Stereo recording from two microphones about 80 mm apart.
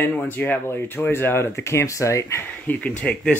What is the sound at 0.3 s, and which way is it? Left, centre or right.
Speech, left.